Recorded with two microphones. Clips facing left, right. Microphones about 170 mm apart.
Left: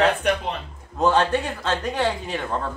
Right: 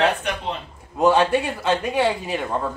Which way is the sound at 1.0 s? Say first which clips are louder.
Right 2 dB; 10° right (ahead or behind).